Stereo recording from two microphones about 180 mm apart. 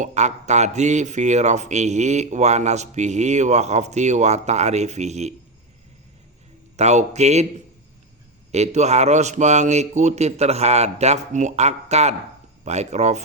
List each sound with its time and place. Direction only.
0.0 s speech: 40° right (ahead or behind)
6.7 s speech: 40° right (ahead or behind)
8.5 s speech: 40° right (ahead or behind)